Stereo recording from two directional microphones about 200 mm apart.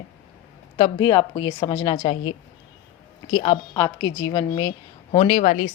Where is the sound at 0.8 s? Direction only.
20° left (ahead or behind).